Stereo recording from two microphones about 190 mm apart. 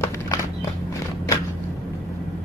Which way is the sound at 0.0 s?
15° left (ahead or behind).